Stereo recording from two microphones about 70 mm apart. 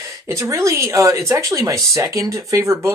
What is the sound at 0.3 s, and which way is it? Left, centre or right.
Speech, right.